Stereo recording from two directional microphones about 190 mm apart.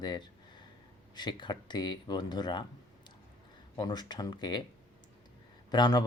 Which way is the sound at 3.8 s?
20° left (ahead or behind).